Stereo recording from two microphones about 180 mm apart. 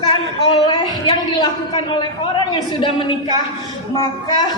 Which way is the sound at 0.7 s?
25° left (ahead or behind).